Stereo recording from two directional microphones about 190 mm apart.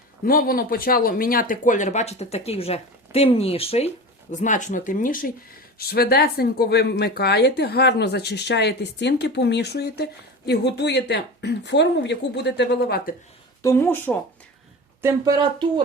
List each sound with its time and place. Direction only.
0.3 s speech: 50° left (ahead or behind)
5.9 s speech: 55° left (ahead or behind)
13.6 s speech: 15° left (ahead or behind)
15.0 s speech: 20° right (ahead or behind)